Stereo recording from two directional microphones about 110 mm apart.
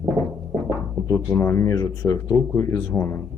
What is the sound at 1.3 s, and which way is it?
Speech, 20° left (ahead or behind).